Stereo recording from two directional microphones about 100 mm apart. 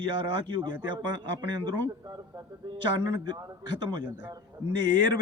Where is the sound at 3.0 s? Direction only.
45° right (ahead or behind).